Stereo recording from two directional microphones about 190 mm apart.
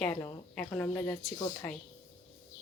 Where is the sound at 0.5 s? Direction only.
5° left (ahead or behind).